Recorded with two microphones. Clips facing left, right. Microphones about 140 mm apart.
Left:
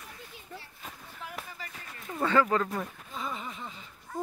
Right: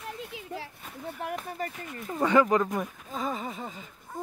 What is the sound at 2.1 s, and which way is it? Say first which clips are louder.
Speech: right 3 dB; 15° right (ahead or behind).